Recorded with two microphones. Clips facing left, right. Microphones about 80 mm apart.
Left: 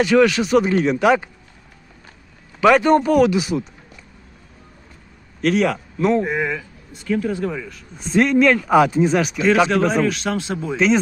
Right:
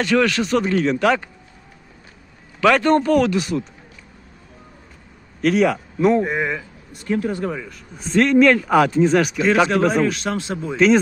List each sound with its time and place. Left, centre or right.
0.0 s speech: centre
2.6 s speech: centre
5.4 s speech: centre
7.1 s speech: right
7.4 s speech: centre
8.1 s speech: centre
10.1 s speech: right
10.5 s speech: centre